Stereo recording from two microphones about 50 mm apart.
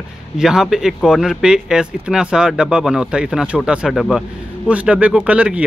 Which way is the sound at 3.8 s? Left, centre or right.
Centre.